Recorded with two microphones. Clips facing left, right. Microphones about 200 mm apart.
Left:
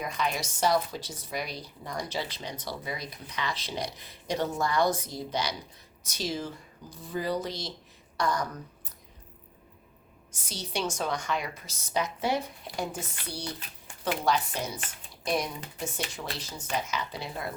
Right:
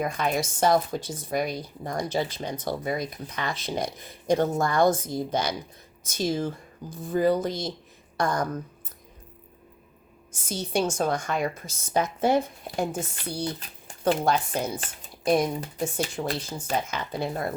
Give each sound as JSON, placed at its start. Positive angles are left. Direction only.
{"t": 0.0, "sound": "speech", "side_deg": -50}
{"t": 10.4, "sound": "speech", "side_deg": -50}